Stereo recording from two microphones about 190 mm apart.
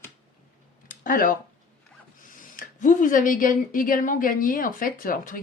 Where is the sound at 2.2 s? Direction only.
45° left (ahead or behind).